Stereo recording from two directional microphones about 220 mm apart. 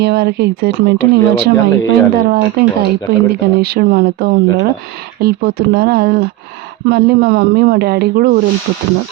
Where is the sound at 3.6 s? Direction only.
45° right (ahead or behind).